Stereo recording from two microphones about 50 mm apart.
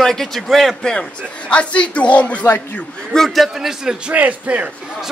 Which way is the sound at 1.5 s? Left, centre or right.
Left.